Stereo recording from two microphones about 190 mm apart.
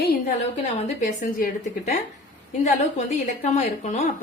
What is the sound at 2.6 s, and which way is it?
A woman's voice, 35° left (ahead or behind).